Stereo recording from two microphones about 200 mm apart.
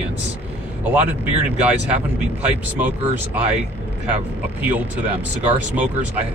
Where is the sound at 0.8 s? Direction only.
10° right (ahead or behind).